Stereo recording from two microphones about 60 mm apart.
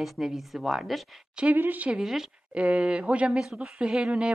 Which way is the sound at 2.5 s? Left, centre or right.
Right.